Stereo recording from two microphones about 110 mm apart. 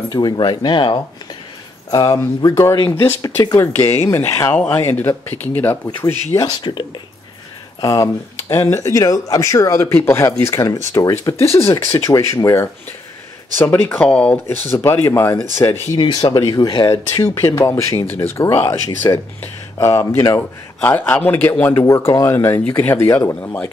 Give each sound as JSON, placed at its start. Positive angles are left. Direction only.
{"t": 0.1, "sound": "speech", "side_deg": 40}
{"t": 2.1, "sound": "a man's voice", "side_deg": 25}
{"t": 6.3, "sound": "speech", "side_deg": 40}
{"t": 7.8, "sound": "a man's voice", "side_deg": 35}
{"t": 16.0, "sound": "speech", "side_deg": 40}
{"t": 17.1, "sound": "a man's voice", "side_deg": 35}